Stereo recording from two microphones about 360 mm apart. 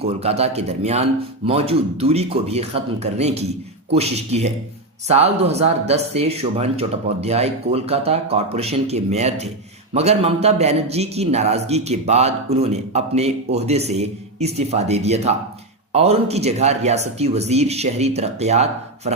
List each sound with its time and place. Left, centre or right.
0.0 s a man's voice: centre